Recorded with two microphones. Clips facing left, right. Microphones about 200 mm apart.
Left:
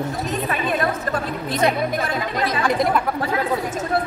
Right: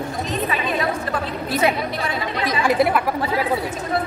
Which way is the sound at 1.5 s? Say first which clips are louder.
Even; 5° right (ahead or behind).